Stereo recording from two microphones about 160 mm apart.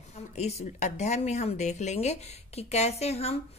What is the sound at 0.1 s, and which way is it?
A woman's voice, 45° left (ahead or behind).